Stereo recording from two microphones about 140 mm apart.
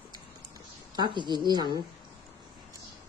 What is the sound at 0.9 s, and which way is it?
Speech, 35° right (ahead or behind).